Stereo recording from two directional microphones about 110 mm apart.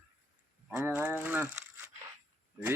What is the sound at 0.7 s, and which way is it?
A man's voice, 15° right (ahead or behind).